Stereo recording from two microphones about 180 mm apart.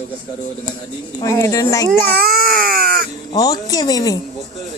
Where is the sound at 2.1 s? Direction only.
55° right (ahead or behind).